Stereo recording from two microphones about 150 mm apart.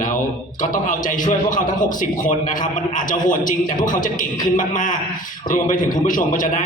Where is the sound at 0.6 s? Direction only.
60° left (ahead or behind).